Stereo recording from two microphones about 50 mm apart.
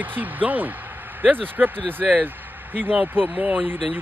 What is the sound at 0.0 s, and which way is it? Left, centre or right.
Speech, right.